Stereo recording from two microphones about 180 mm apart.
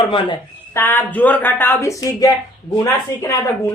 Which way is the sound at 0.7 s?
10° left (ahead or behind).